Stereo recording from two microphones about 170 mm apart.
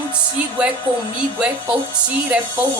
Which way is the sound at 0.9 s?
30° right (ahead or behind).